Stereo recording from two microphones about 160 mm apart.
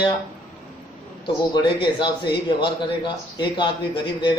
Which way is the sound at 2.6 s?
30° left (ahead or behind).